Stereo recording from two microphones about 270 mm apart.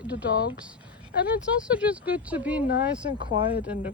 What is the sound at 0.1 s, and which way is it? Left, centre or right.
Speech, centre.